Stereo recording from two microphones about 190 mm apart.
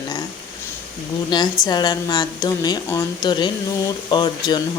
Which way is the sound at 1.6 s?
20° left (ahead or behind).